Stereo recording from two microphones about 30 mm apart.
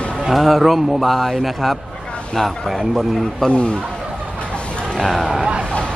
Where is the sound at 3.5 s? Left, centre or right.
Left.